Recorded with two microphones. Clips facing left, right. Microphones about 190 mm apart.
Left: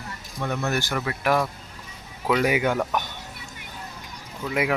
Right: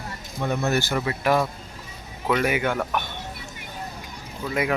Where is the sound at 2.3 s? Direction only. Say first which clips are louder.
Left 2 dB; 15° left (ahead or behind).